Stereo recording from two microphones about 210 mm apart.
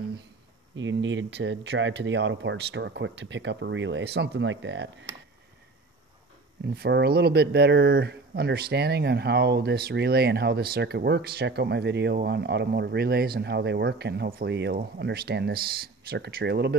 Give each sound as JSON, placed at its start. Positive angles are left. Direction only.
{"t": 0.7, "sound": "speech", "side_deg": -60}
{"t": 6.6, "sound": "speech", "side_deg": -50}